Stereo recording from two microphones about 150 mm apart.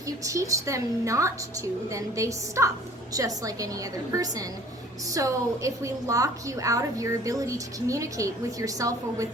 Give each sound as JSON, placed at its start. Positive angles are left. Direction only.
{"t": 0.3, "sound": "a woman's voice", "side_deg": -20}